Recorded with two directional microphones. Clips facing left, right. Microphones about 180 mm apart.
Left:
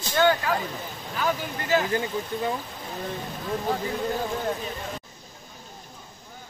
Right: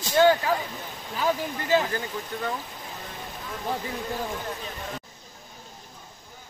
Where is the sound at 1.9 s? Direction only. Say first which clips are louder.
Left 4 dB; 20° left (ahead or behind).